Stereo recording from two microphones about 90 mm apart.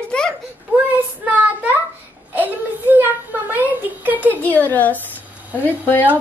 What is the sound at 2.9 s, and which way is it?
A woman's voice, 20° right (ahead or behind).